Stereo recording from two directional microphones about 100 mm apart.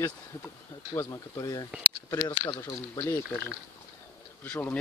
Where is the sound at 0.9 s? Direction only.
35° left (ahead or behind); by 4.7 s 20° left (ahead or behind).